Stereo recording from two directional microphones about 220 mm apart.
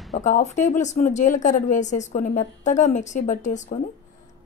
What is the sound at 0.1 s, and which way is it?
Speech, 35° left (ahead or behind).